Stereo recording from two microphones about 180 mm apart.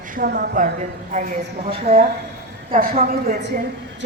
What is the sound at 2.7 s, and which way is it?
Speech, 55° right (ahead or behind).